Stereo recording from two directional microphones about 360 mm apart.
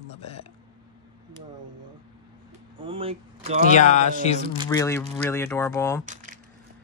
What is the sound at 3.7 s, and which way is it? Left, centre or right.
Speech, centre.